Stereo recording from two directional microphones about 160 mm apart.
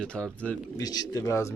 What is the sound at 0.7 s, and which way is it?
Speech, 25° left (ahead or behind).